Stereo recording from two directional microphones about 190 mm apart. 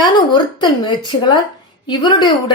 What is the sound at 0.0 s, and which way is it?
Speech, 25° left (ahead or behind).